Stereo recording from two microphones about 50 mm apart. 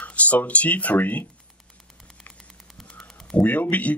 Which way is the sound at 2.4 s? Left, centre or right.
Centre.